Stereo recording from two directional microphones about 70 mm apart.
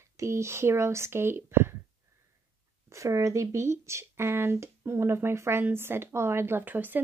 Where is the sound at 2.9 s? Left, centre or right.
Right.